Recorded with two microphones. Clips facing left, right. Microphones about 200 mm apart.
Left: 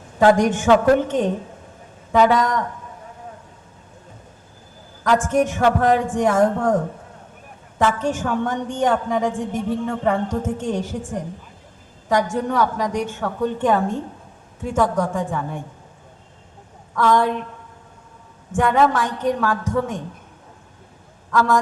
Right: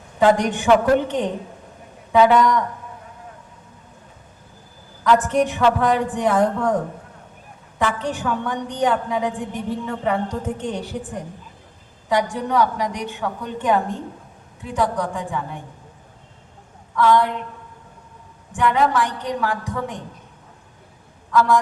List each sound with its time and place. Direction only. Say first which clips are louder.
0.3 s a woman's voice: left 1 dB; 45° left (ahead or behind)
5.0 s a woman's voice: even; 45° left (ahead or behind)
7.8 s a woman's voice: left 3 dB; 45° left (ahead or behind)
16.9 s a woman's voice: right 1 dB; 45° left (ahead or behind)
18.5 s a woman's voice: left 1 dB; 45° left (ahead or behind)